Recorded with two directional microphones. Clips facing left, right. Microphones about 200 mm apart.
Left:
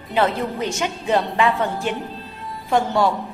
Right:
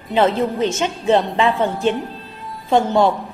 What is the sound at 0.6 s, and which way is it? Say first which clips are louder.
A woman's voice: right 5 dB; 25° right (ahead or behind).